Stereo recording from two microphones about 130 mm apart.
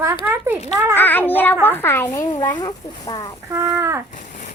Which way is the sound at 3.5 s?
20° right (ahead or behind).